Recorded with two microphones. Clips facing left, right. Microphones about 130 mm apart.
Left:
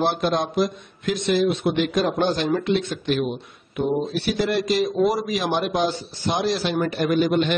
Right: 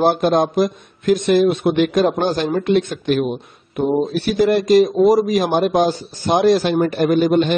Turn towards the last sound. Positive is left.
turn(degrees=-40)  # may be behind; listen again after turning